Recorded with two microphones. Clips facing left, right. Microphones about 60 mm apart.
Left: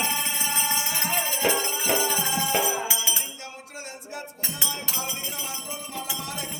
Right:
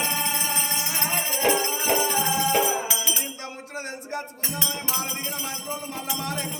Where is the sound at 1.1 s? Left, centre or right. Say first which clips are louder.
Right 2 dB; centre.